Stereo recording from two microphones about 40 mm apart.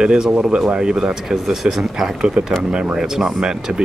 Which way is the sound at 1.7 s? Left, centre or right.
Centre.